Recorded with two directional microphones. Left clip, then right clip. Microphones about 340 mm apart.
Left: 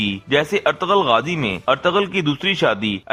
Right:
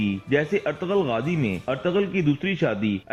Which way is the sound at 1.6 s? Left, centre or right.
Left.